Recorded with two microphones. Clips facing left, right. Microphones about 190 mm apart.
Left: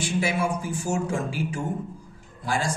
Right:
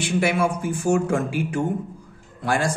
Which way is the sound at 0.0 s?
65° right (ahead or behind).